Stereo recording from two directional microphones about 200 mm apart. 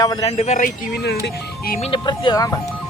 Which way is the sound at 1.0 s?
55° left (ahead or behind).